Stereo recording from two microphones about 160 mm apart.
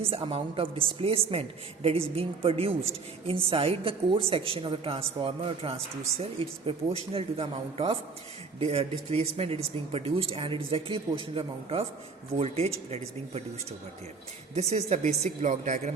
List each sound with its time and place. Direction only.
0.0 s speech: 35° right (ahead or behind)
14.5 s speech: 45° right (ahead or behind)